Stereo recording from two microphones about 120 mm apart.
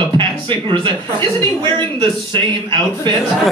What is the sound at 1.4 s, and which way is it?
Speech, 20° left (ahead or behind).